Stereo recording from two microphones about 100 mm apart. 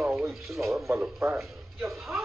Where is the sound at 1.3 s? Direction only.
Centre (ahead or behind).